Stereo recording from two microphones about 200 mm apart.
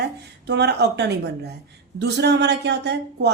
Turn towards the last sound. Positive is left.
turn(degrees=-60)  # may be behind; listen again after turning